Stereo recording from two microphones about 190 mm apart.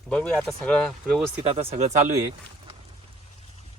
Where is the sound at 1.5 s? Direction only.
35° right (ahead or behind).